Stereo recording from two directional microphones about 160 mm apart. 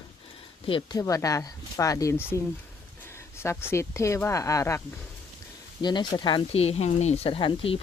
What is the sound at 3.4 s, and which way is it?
Speech, 15° left (ahead or behind).